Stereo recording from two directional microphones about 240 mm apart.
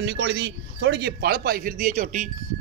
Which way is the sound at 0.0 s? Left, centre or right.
Right.